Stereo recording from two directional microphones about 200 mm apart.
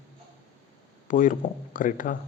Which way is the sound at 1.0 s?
40° left (ahead or behind).